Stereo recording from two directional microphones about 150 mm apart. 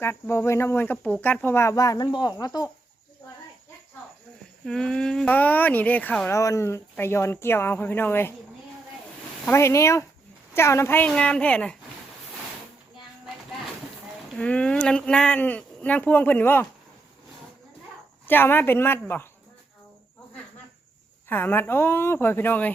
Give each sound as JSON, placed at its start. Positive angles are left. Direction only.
{"t": 0.0, "sound": "speech", "side_deg": 15}
{"t": 4.6, "sound": "speech", "side_deg": 5}
{"t": 9.5, "sound": "speech", "side_deg": 20}
{"t": 14.3, "sound": "speech", "side_deg": 10}
{"t": 18.3, "sound": "speech", "side_deg": 15}
{"t": 21.2, "sound": "speech", "side_deg": 15}